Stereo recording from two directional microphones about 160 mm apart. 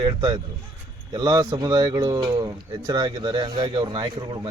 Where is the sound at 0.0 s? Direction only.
30° right (ahead or behind).